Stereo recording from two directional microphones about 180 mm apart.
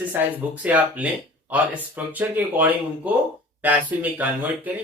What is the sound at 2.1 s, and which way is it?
Speech, 10° right (ahead or behind).